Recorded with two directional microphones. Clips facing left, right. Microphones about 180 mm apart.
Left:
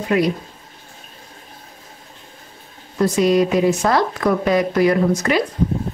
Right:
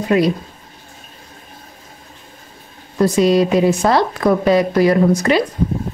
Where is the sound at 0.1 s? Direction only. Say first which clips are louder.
Right 3 dB; 30° right (ahead or behind).